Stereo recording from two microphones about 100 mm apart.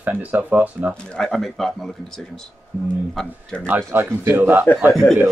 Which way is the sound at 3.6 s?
25° right (ahead or behind).